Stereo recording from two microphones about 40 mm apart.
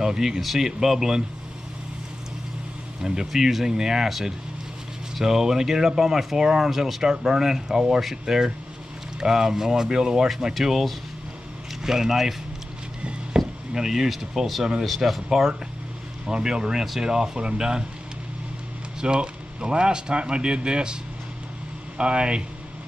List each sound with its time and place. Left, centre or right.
0.0 s speech: centre
0.4 s speech: centre
3.0 s speech: centre
13.4 s speech: centre
14.6 s speech: centre
16.3 s speech: right
18.9 s speech: right